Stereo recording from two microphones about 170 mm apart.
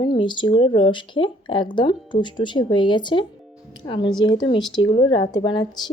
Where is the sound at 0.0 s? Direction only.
25° left (ahead or behind).